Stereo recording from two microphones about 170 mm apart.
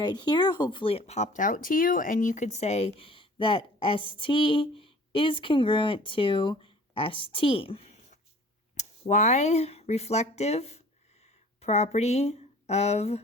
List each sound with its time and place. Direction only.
0.0 s speech: 25° left (ahead or behind)